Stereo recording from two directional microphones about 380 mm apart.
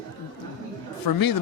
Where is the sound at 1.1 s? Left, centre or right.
Left.